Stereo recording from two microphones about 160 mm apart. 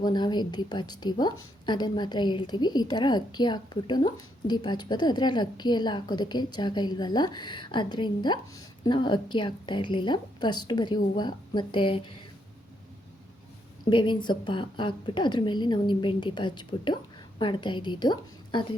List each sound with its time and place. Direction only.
0.0 s a woman's voice: 25° left (ahead or behind)
13.9 s a woman's voice: 30° left (ahead or behind)